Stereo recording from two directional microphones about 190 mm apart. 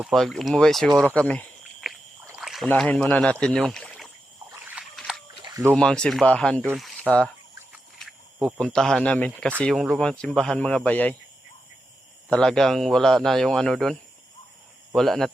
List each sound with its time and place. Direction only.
0.0 s a man's voice: centre (ahead or behind)
1.1 s cricket: 5° left (ahead or behind)
2.2 s rowboat: 5° right (ahead or behind)
2.6 s speech: 10° left (ahead or behind)
3.4 s a sound: 5° left (ahead or behind)
5.4 s a sound: 20° right (ahead or behind)
5.7 s a man's voice: 5° left (ahead or behind)
8.5 s a man's voice: 5° left (ahead or behind)
12.3 s a man's voice: 5° left (ahead or behind)
14.9 s a man's voice: centre (ahead or behind)